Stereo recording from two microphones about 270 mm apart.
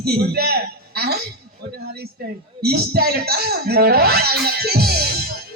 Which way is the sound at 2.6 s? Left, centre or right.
Right.